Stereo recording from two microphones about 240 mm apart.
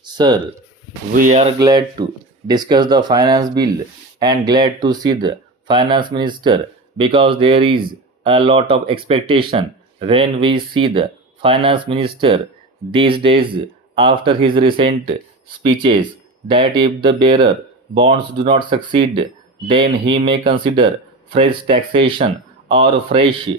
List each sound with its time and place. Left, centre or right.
0.0 s speech: centre
1.1 s speech: right